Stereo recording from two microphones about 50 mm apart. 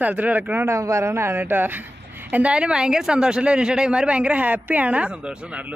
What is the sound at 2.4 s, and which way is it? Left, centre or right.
Speech, right.